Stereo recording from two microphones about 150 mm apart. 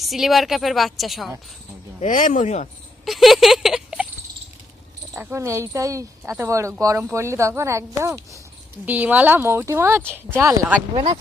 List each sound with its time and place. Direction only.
0.0 s a woman's voice: centre (ahead or behind)
2.0 s speech: 60° left (ahead or behind)
3.0 s a sound: centre (ahead or behind)
5.1 s speech: 15° right (ahead or behind)
10.9 s speech: 35° right (ahead or behind)